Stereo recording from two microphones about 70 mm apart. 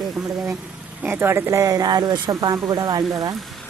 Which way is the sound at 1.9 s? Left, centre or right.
Right.